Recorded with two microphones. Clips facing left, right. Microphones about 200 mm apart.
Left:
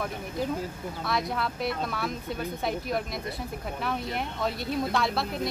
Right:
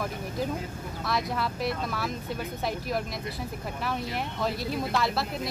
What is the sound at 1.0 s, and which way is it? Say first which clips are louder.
Speech: even; centre (ahead or behind).